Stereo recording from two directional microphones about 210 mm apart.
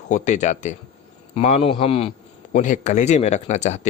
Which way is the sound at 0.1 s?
35° left (ahead or behind).